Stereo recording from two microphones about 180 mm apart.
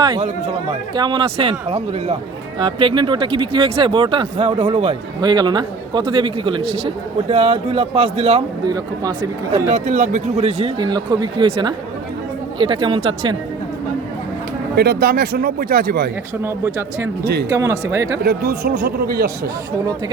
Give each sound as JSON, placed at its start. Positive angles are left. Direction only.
{"t": 0.2, "sound": "speech", "side_deg": -40}
{"t": 0.9, "sound": "speech", "side_deg": -25}
{"t": 8.6, "sound": "speech", "side_deg": -20}
{"t": 9.7, "sound": "speech", "side_deg": -45}
{"t": 10.8, "sound": "speech", "side_deg": -25}
{"t": 14.8, "sound": "speech", "side_deg": -60}
{"t": 16.4, "sound": "speech", "side_deg": -15}
{"t": 18.3, "sound": "speech", "side_deg": -55}